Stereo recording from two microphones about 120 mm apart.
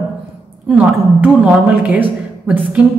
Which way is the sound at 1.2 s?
10° right (ahead or behind).